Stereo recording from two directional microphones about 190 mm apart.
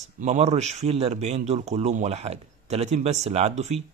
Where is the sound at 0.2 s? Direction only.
35° right (ahead or behind).